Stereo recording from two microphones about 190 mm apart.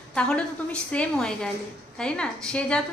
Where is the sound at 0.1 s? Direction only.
5° left (ahead or behind).